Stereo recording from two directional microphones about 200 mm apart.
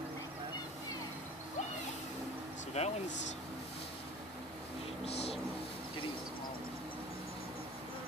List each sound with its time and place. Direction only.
2.8 s speech: 35° left (ahead or behind)
5.0 s vehicle: 30° left (ahead or behind)